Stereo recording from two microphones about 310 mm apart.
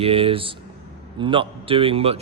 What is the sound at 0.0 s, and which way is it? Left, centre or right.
A man's voice, centre.